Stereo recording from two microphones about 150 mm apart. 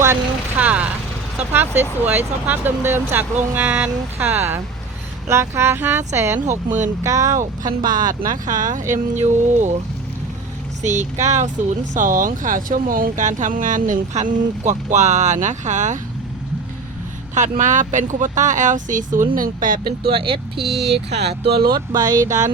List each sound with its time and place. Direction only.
0.0 s vehicle: 15° right (ahead or behind)
2.0 s speech: 10° right (ahead or behind)
6.5 s speech: 55° right (ahead or behind)
7.0 s speech: 20° right (ahead or behind)
7.9 s speech: 65° right (ahead or behind)
10.8 s speech: 50° right (ahead or behind)
17.3 s speech: 55° right (ahead or behind); by 20.1 s 75° right (ahead or behind)
20.1 s speech: 35° right (ahead or behind)
20.6 s speech: 90° right
22.1 s speech: 60° right (ahead or behind)